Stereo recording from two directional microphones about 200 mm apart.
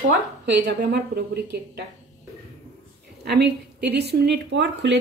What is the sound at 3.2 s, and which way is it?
A woman's voice, 55° right (ahead or behind).